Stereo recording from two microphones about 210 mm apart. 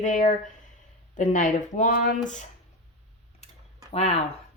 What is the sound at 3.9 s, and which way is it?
Speech, 30° left (ahead or behind).